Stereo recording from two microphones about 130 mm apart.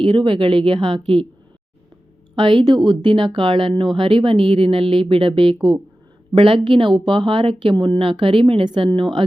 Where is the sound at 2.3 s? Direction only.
40° right (ahead or behind).